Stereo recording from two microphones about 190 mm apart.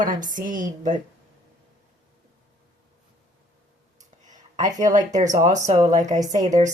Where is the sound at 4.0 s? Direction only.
40° right (ahead or behind).